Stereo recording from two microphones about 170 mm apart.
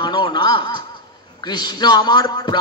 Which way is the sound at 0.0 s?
25° left (ahead or behind).